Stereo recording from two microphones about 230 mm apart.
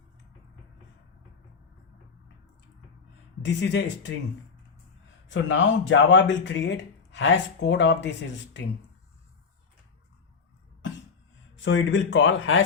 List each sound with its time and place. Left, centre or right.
3.4 s speech: left
5.3 s speech: left
11.6 s speech: left